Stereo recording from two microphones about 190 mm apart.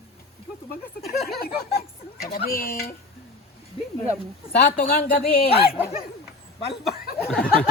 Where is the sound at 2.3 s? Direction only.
50° left (ahead or behind).